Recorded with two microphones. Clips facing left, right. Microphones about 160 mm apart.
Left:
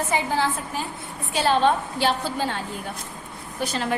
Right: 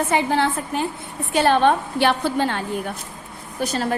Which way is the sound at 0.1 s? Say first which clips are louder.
Right 2 dB; 65° right (ahead or behind).